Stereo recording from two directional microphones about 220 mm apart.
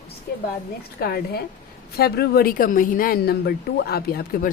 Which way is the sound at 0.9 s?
45° left (ahead or behind).